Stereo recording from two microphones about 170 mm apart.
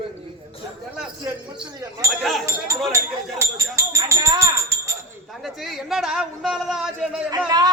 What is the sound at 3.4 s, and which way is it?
Music, 15° right (ahead or behind).